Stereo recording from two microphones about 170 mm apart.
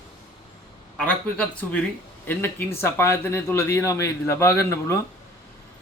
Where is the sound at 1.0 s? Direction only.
5° left (ahead or behind).